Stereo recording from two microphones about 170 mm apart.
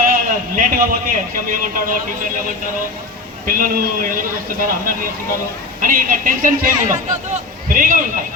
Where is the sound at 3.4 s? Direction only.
55° right (ahead or behind).